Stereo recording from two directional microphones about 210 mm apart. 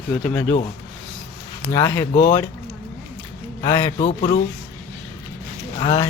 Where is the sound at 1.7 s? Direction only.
15° left (ahead or behind).